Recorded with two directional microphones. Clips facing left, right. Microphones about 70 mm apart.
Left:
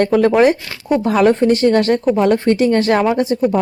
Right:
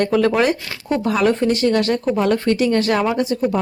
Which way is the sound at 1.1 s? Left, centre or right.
Left.